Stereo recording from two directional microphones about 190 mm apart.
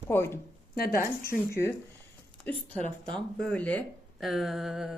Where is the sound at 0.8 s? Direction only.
55° left (ahead or behind).